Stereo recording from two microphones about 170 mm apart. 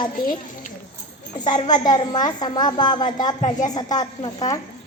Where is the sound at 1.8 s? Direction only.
25° left (ahead or behind).